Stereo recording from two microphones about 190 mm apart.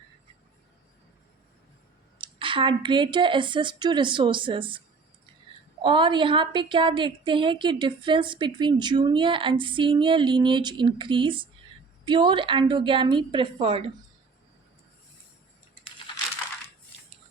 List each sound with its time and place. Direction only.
2.1 s a woman's voice: 25° right (ahead or behind)
5.8 s a woman's voice: 25° right (ahead or behind)